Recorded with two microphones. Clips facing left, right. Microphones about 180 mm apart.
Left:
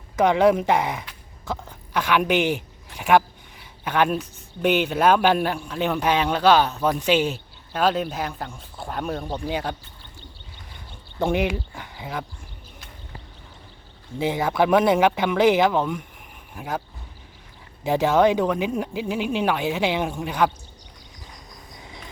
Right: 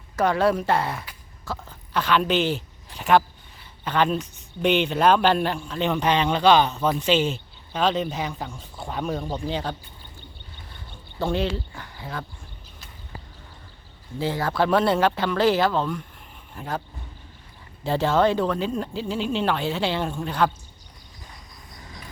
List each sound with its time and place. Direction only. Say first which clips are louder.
0.2 s speech: left 3 dB; 15° left (ahead or behind)
11.2 s speech: left 2 dB; 15° left (ahead or behind)
14.2 s speech: left 2 dB; 20° left (ahead or behind)
17.8 s speech: left 2 dB; 15° left (ahead or behind)